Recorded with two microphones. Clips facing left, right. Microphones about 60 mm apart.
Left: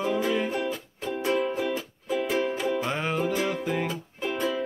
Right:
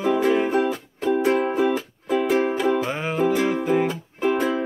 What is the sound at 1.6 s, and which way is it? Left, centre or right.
Music, right.